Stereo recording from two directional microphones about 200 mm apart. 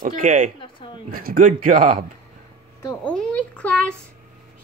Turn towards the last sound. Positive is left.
turn(degrees=5)  # may be behind; listen again after turning